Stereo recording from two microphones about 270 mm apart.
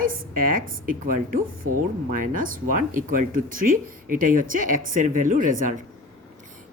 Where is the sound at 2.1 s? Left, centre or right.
Right.